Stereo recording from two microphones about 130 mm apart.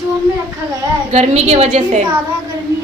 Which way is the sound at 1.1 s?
55° right (ahead or behind).